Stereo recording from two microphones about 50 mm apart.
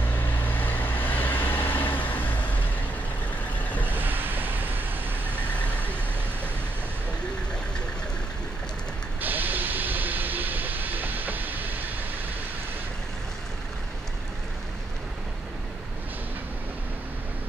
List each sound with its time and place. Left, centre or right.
0.4 s vehicle: left
3.9 s vehicle: right
9.2 s vehicle: right